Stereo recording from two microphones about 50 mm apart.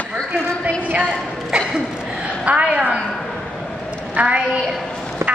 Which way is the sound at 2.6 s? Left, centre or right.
Centre.